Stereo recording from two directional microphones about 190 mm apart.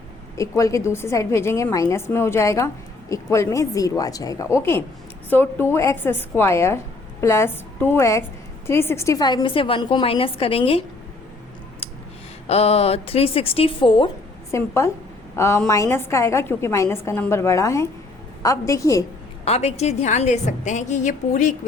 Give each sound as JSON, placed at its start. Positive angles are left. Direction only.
{"t": 0.3, "sound": "a woman's voice", "side_deg": 15}
{"t": 12.5, "sound": "a woman's voice", "side_deg": 35}
{"t": 14.5, "sound": "a woman's voice", "side_deg": 15}
{"t": 19.5, "sound": "a woman's voice", "side_deg": 35}